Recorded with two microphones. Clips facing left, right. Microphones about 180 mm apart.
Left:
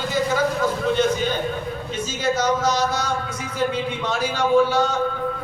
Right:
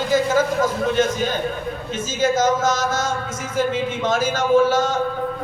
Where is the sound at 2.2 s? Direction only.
45° right (ahead or behind).